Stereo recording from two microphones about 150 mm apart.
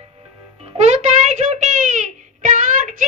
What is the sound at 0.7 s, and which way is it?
Child singing, 50° right (ahead or behind).